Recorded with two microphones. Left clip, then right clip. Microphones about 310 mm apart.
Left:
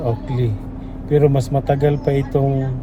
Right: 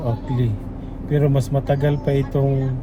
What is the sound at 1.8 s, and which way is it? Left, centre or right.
Speech, left.